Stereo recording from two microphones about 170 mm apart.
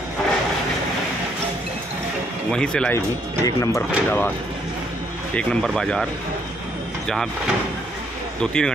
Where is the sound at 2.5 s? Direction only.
5° left (ahead or behind).